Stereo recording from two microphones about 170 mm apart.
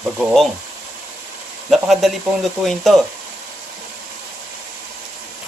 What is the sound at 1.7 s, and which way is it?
Speech, centre (ahead or behind).